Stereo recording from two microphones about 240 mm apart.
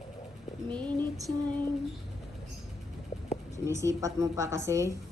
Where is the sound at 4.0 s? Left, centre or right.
Centre.